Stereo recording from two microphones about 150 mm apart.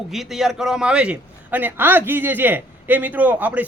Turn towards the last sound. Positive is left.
turn(degrees=-10)  # may be behind; listen again after turning